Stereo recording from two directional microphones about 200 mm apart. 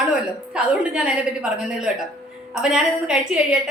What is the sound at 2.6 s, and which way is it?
Speech, 5° right (ahead or behind).